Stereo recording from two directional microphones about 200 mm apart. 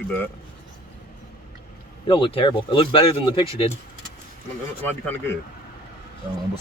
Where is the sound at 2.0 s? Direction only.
25° left (ahead or behind).